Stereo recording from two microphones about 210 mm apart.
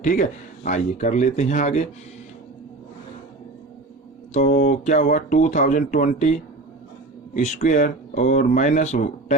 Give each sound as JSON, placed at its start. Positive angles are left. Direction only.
{"t": 0.0, "sound": "speech", "side_deg": 40}
{"t": 4.4, "sound": "speech", "side_deg": 40}